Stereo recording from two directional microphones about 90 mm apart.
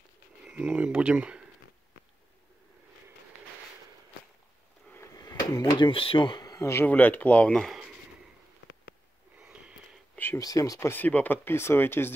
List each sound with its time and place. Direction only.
0.5 s speech: 15° right (ahead or behind)
5.1 s speech: 45° left (ahead or behind)
6.5 s speech: 30° left (ahead or behind)
6.9 s speech: 20° left (ahead or behind)
9.4 s a sound: 10° right (ahead or behind)
10.1 s a sound: 25° left (ahead or behind)
10.4 s speech: 40° left (ahead or behind)
10.9 s speech: 20° left (ahead or behind)